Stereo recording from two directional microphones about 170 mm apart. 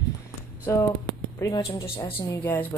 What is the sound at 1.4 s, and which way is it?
Speech, 20° left (ahead or behind).